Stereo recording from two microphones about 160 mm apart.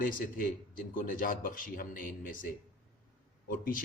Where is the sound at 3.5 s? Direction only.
60° left (ahead or behind).